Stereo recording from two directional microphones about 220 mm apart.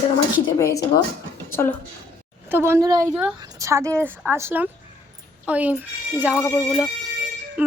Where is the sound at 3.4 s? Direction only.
15° right (ahead or behind).